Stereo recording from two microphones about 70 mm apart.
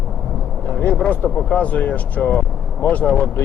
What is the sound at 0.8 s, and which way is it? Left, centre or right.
Speech, left.